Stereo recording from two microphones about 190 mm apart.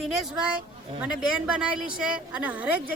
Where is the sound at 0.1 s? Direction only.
Centre (ahead or behind).